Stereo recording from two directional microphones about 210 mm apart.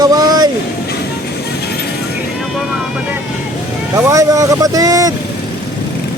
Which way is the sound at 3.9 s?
15° right (ahead or behind).